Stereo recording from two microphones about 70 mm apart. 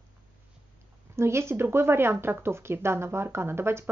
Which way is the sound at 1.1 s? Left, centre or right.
Right.